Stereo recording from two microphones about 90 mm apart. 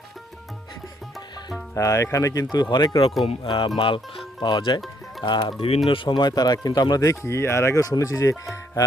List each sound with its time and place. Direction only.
1.7 s speech: 35° left (ahead or behind); by 3.0 s 55° left (ahead or behind)
3.2 s speech: 75° left (ahead or behind)
4.4 s speech: 55° left (ahead or behind); by 8.4 s 35° left (ahead or behind)